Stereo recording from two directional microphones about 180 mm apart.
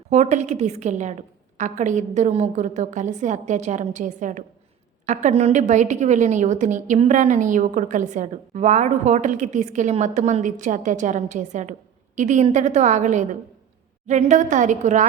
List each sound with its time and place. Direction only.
0.1 s a woman's voice: 40° right (ahead or behind)